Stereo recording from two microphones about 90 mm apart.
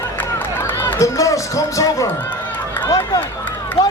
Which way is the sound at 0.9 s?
35° left (ahead or behind).